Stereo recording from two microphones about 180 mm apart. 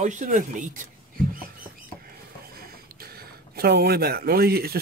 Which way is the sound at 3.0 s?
60° right (ahead or behind).